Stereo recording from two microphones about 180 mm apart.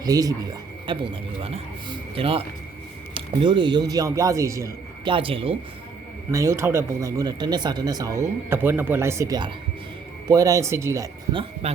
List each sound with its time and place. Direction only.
0.0 s speech: 20° right (ahead or behind)
1.4 s speech: 30° right (ahead or behind); by 4.7 s 15° right (ahead or behind)
5.0 s speech: 30° right (ahead or behind)
6.3 s speech: 15° right (ahead or behind)
11.6 s speech: 35° right (ahead or behind)